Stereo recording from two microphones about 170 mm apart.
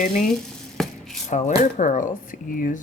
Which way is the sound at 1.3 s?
45° left (ahead or behind).